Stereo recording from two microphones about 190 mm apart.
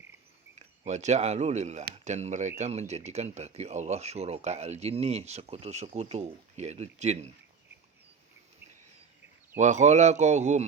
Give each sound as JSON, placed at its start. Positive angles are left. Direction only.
{"t": 0.5, "sound": "speech", "side_deg": -35}
{"t": 9.6, "sound": "speech", "side_deg": -40}